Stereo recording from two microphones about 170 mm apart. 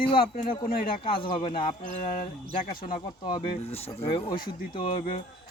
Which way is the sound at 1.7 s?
50° left (ahead or behind).